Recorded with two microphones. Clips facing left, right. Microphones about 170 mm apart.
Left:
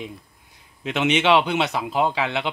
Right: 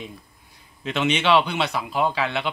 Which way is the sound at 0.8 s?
15° left (ahead or behind).